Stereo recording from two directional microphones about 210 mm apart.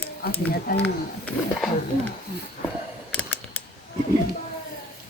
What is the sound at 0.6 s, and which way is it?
Speech, 55° left (ahead or behind).